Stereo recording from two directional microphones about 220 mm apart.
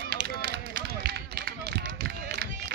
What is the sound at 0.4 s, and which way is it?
Run, 50° right (ahead or behind).